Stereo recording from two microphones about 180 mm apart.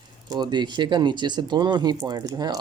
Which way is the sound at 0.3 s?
25° right (ahead or behind).